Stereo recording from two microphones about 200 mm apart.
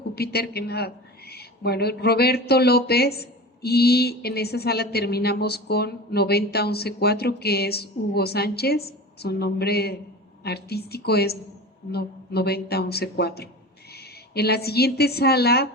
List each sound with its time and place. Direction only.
0.2 s a woman's voice: 55° left (ahead or behind)